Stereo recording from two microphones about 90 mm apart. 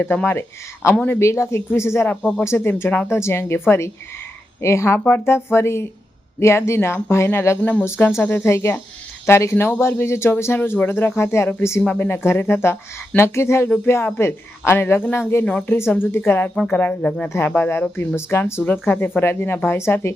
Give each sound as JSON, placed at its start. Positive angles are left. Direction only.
{"t": 0.3, "sound": "speech", "side_deg": 30}
{"t": 4.9, "sound": "speech", "side_deg": 20}
{"t": 15.4, "sound": "speech", "side_deg": 15}
{"t": 17.2, "sound": "speech", "side_deg": 25}